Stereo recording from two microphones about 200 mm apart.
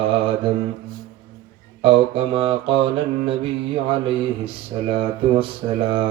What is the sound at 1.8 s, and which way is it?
Mantra, 25° right (ahead or behind).